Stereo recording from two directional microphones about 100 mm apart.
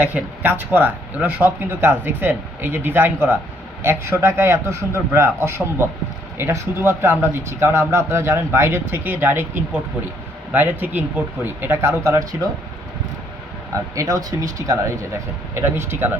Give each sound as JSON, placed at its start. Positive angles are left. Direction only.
{"t": 0.0, "sound": "speech", "side_deg": -20}
{"t": 13.9, "sound": "speech", "side_deg": -35}